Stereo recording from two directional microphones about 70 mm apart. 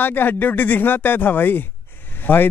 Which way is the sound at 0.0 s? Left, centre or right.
Left.